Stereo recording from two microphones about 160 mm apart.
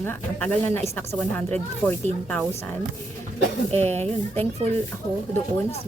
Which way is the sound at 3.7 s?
15° left (ahead or behind).